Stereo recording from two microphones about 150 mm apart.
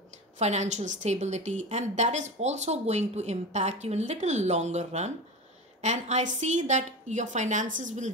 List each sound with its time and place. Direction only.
0.4 s a woman's voice: 50° right (ahead or behind)